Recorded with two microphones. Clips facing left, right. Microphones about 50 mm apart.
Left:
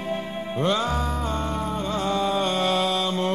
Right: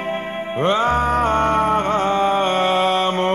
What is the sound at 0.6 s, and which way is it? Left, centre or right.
Music, right.